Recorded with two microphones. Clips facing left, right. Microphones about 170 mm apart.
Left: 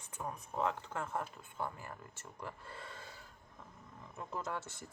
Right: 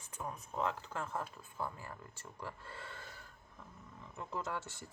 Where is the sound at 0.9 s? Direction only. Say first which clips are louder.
Left 1 dB; 25° left (ahead or behind).